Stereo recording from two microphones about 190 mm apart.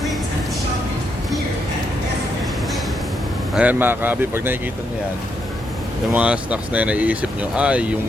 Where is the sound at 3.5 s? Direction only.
10° right (ahead or behind).